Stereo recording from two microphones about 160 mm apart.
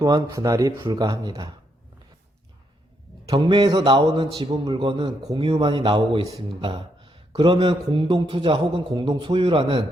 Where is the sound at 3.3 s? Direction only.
30° right (ahead or behind).